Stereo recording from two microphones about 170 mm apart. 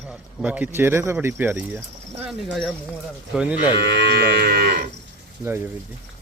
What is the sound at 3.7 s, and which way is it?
Cattle, 85° right.